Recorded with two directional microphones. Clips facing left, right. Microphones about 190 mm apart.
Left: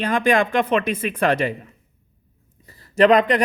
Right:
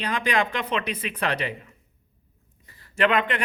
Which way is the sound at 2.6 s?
35° left (ahead or behind).